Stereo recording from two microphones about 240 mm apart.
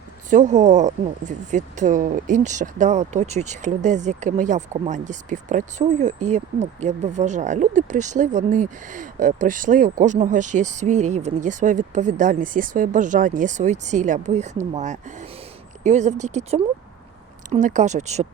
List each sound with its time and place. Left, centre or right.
0.3 s speech: right